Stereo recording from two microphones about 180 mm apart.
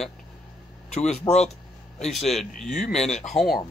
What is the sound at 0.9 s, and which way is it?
Speech, 40° left (ahead or behind).